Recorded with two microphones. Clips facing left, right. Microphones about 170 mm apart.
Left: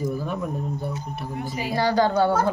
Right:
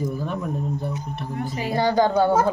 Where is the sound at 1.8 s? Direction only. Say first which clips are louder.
Right 1 dB; 20° right (ahead or behind).